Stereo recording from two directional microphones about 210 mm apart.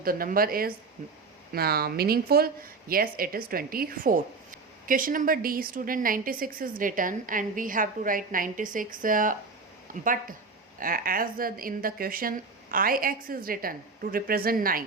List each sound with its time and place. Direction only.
0.0 s a woman's voice: 45° right (ahead or behind)